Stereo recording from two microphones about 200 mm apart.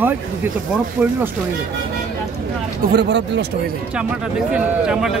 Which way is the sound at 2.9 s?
60° right (ahead or behind).